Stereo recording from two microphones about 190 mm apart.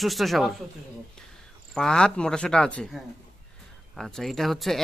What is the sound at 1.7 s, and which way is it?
A man's voice, 5° left (ahead or behind).